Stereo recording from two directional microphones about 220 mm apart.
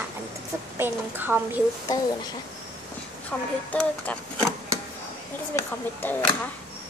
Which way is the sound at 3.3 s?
5° left (ahead or behind).